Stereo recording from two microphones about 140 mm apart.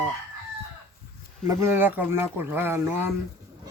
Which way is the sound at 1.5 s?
20° right (ahead or behind).